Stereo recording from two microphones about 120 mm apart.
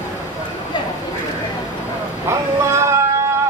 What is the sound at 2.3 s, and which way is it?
Boat, 20° right (ahead or behind).